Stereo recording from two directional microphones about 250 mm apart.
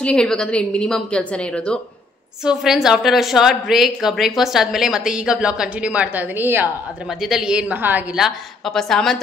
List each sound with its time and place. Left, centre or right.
0.0 s a woman's voice: centre